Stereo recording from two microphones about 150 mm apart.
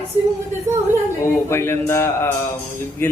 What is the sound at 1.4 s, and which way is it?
Speech, 15° left (ahead or behind).